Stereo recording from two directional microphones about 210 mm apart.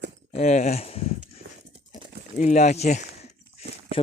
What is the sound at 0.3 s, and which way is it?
Speech, 35° left (ahead or behind).